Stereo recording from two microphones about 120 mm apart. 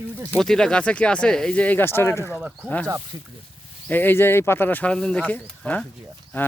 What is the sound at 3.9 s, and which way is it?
Speech, 15° left (ahead or behind).